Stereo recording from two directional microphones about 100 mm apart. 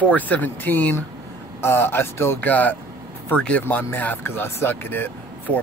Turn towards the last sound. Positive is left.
turn(degrees=20)  # may be behind; listen again after turning